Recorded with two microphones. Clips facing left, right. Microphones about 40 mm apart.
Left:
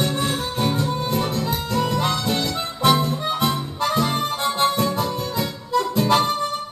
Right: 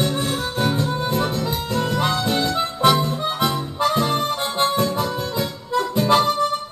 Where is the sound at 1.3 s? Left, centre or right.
Centre.